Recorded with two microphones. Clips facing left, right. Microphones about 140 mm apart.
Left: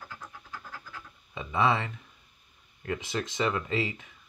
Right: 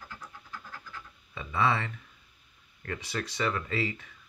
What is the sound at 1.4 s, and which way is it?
Speech, 15° left (ahead or behind).